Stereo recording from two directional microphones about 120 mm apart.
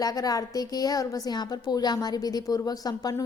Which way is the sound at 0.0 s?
30° left (ahead or behind).